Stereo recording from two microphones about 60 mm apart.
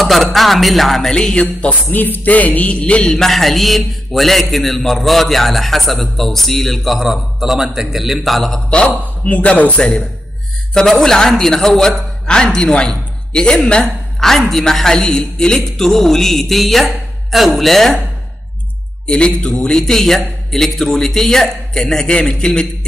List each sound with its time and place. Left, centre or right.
0.0 s a man's voice: centre
1.7 s speech: left
3.2 s a man's voice: centre
8.6 s speech: centre
9.8 s a man's voice: centre
19.0 s a man's voice: centre